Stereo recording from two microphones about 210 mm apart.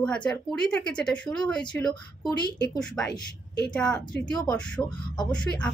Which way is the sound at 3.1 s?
50° left (ahead or behind).